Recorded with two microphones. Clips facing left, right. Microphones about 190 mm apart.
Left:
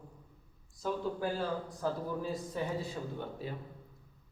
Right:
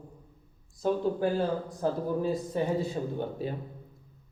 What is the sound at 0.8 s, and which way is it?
A man's voice, 25° right (ahead or behind).